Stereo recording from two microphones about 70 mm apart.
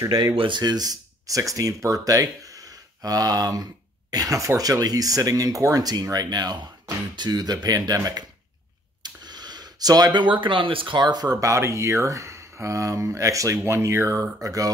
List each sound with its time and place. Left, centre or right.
0.0 s speech: right
7.6 s speech: right
9.0 s a sound: right
11.0 s speech: right